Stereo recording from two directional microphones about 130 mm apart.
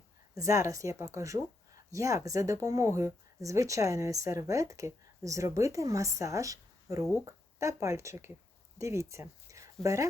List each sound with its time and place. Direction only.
0.3 s speech: 25° right (ahead or behind)